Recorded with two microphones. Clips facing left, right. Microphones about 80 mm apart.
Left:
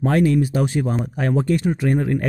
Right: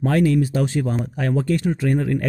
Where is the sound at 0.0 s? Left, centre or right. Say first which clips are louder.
Left 1 dB; left.